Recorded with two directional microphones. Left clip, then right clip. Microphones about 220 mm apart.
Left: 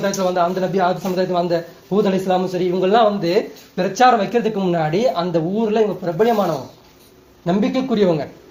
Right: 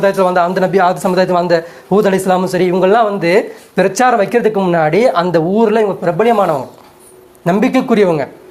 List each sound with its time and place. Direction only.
0.0 s a man's voice: 30° right (ahead or behind)
7.4 s a man's voice: 25° right (ahead or behind)